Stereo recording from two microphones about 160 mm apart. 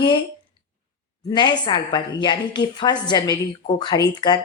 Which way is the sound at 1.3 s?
30° left (ahead or behind).